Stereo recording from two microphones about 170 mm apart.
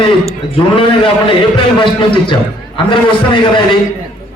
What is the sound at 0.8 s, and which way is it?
A man's voice, 30° left (ahead or behind).